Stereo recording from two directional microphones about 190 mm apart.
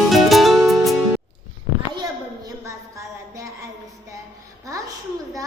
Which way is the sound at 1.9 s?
20° right (ahead or behind).